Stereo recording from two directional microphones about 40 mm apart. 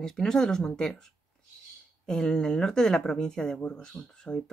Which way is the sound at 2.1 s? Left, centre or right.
Centre.